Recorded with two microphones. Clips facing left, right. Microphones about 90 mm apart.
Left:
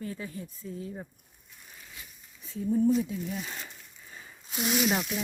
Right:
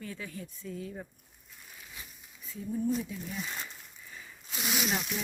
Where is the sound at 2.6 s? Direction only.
45° left (ahead or behind).